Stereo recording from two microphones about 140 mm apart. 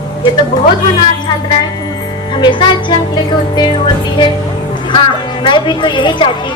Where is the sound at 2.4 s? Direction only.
35° left (ahead or behind).